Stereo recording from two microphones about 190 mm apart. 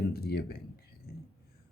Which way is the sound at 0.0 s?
55° left (ahead or behind).